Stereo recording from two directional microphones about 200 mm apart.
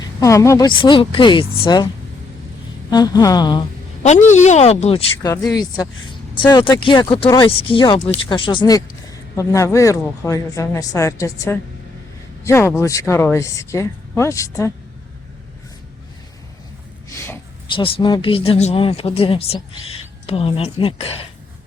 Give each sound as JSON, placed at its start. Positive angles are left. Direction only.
{"t": 0.2, "sound": "speech", "side_deg": 15}
{"t": 2.9, "sound": "speech", "side_deg": 20}
{"t": 4.0, "sound": "speech", "side_deg": 35}
{"t": 5.2, "sound": "speech", "side_deg": 15}
{"t": 17.1, "sound": "a sound", "side_deg": 15}
{"t": 17.7, "sound": "speech", "side_deg": 25}